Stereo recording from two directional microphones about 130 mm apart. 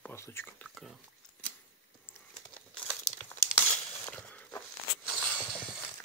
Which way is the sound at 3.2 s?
20° left (ahead or behind).